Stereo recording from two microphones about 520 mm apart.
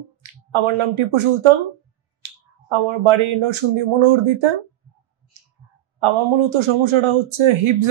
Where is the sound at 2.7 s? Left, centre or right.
Right.